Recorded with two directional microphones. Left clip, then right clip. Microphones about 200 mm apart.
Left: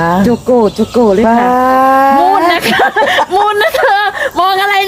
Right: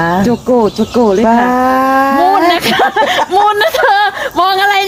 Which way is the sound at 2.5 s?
10° right (ahead or behind).